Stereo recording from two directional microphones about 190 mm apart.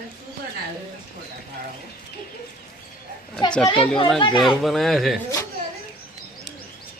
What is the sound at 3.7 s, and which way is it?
Speech, 25° left (ahead or behind).